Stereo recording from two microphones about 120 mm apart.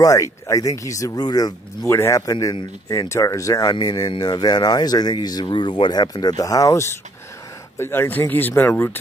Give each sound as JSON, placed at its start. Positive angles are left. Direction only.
{"t": 0.0, "sound": "speech", "side_deg": 25}
{"t": 1.9, "sound": "speech", "side_deg": 25}